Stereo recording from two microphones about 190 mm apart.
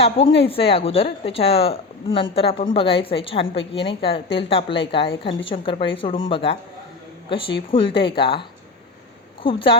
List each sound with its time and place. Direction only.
0.0 s a woman's voice: 30° left (ahead or behind)